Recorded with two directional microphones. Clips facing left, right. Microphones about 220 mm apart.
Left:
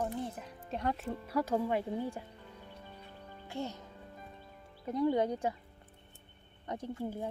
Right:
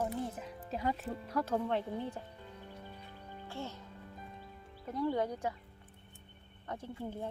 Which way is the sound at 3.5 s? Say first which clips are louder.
Left 4 dB; 15° left (ahead or behind).